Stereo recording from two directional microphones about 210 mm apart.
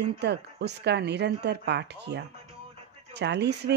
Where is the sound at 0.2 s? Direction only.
55° right (ahead or behind).